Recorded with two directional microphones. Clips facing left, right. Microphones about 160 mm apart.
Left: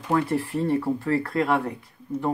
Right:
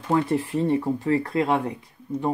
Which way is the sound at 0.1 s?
20° right (ahead or behind).